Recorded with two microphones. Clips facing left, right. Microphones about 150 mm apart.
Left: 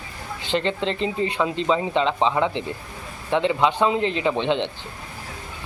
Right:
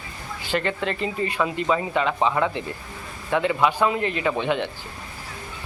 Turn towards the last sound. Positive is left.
turn(degrees=20)  # may be behind; listen again after turning